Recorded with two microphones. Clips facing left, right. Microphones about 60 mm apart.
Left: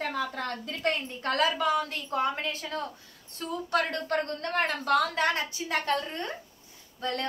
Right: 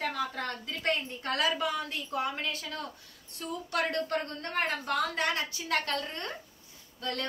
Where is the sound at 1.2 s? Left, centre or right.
Left.